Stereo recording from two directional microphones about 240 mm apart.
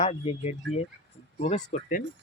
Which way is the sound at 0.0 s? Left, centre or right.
Left.